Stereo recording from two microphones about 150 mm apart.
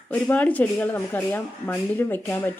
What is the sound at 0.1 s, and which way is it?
Speech, 10° left (ahead or behind).